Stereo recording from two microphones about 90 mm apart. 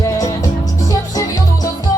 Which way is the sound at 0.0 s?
40° left (ahead or behind).